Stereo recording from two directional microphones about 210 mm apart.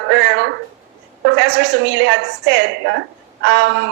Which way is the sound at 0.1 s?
60° right (ahead or behind).